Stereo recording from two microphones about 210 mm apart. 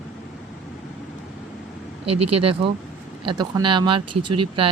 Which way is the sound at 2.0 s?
25° right (ahead or behind).